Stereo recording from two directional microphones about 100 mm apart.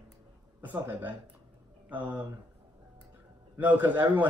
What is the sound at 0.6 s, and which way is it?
A man's voice, 20° right (ahead or behind).